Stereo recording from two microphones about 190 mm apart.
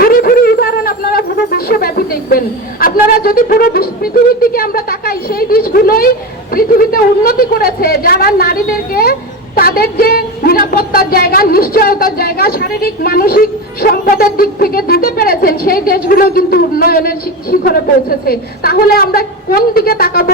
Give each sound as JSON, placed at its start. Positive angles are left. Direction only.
{"t": 0.0, "sound": "music", "side_deg": 50}
{"t": 6.5, "sound": "a woman's voice", "side_deg": 50}
{"t": 9.6, "sound": "a sound", "side_deg": 55}